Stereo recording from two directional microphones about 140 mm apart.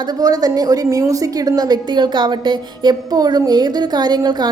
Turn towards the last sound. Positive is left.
turn(degrees=-30)  # may be behind; listen again after turning